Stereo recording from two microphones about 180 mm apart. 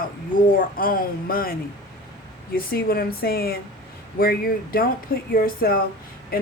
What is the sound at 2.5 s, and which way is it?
Speech, 55° left (ahead or behind).